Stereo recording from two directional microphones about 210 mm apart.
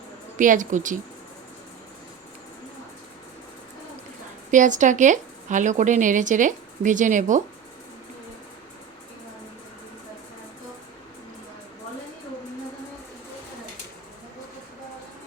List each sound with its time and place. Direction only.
0.3 s speech: 40° right (ahead or behind)
4.5 s speech: 35° right (ahead or behind)